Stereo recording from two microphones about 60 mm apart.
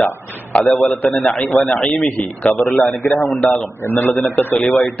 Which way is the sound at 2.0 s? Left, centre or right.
Centre.